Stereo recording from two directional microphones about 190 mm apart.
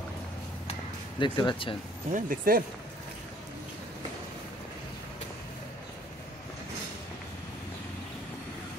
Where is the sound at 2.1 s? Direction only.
45° right (ahead or behind).